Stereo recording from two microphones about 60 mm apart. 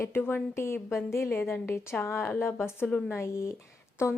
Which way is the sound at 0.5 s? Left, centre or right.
Left.